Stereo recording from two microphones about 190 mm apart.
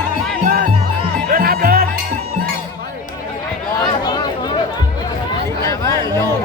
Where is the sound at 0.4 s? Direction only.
45° right (ahead or behind).